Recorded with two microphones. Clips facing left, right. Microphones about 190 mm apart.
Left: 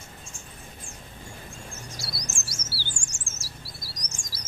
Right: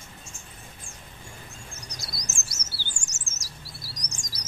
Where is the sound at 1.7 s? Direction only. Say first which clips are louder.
Left 3 dB; 20° right (ahead or behind).